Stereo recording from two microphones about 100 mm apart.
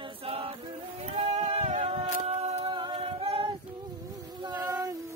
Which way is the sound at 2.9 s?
75° right (ahead or behind).